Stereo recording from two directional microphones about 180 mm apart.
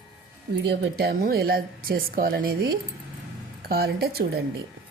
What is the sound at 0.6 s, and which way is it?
Speech, 65° right (ahead or behind).